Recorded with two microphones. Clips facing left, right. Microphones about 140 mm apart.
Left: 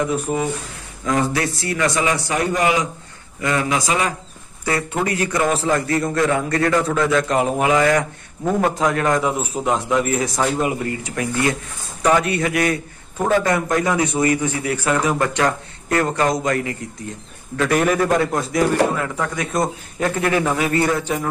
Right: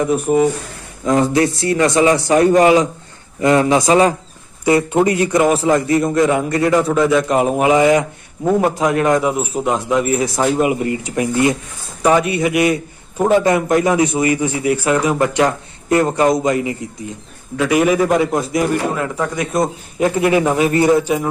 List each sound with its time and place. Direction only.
0.1 s a man's voice: 20° right (ahead or behind)
4.6 s speech: 20° right (ahead or behind)
9.2 s a man's voice: 5° right (ahead or behind)